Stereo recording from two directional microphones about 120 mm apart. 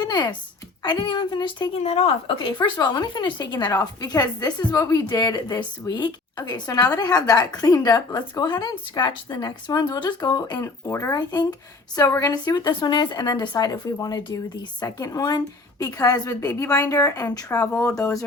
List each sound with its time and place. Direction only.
0.0 s a woman's voice: 35° left (ahead or behind)
1.8 s a woman's voice: 60° left (ahead or behind); by 10.3 s 40° left (ahead or behind)
10.3 s a woman's voice: 25° left (ahead or behind)